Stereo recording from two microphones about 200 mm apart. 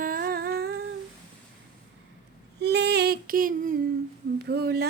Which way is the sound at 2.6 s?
55° right (ahead or behind).